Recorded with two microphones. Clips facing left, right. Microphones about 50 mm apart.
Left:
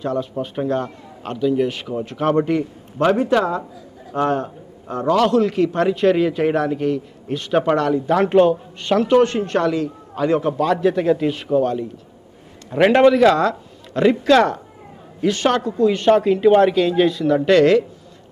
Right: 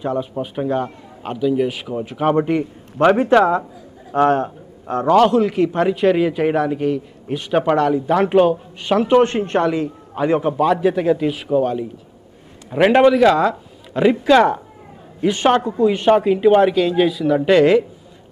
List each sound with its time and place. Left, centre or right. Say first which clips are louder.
0.0 s a man's voice: right 1 dB; centre
3.0 s a man's voice: right 4 dB; right
5.4 s a man's voice: right 1 dB; centre